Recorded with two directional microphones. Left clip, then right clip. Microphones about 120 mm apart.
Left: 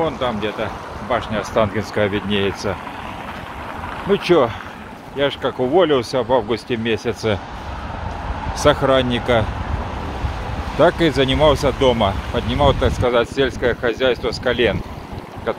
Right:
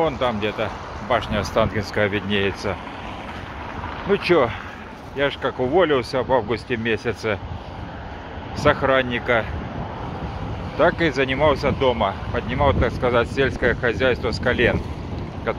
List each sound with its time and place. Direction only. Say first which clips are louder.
0.0 s speech: left 1 dB; 20° right (ahead or behind)
1.4 s speech: left 2 dB; 15° left (ahead or behind)
4.1 s speech: left 3 dB; 25° left (ahead or behind)
8.5 s speech: left 3 dB; 20° left (ahead or behind)
10.8 s speech: left 4 dB; 25° left (ahead or behind)